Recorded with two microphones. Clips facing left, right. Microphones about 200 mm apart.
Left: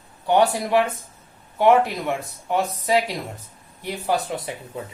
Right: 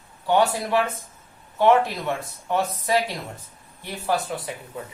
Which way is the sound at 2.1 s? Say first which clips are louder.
Left 1 dB; 15° left (ahead or behind).